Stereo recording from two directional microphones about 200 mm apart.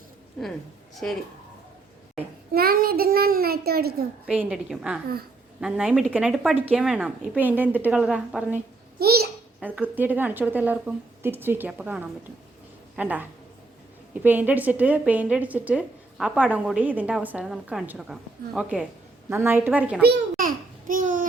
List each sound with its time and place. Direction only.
0.4 s a woman's voice: centre (ahead or behind)
2.5 s a child's voice: 50° right (ahead or behind)
4.3 s a woman's voice: 5° right (ahead or behind)
9.0 s babbling: 50° right (ahead or behind)
9.6 s a woman's voice: 5° right (ahead or behind)
14.3 s a woman's voice: 10° right (ahead or behind)
20.0 s a child's voice: 50° right (ahead or behind)